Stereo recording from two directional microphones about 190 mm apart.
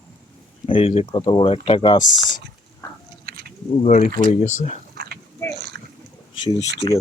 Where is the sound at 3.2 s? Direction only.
50° right (ahead or behind).